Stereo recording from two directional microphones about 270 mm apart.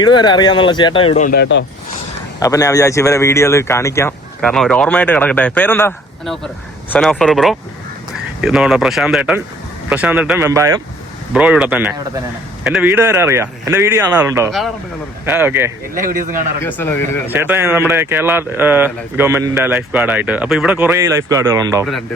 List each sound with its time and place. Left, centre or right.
0.0 s speech: centre; by 1.6 s left
2.4 s speech: centre
16.0 s a man's voice: right
16.6 s speech: centre
17.2 s speech: centre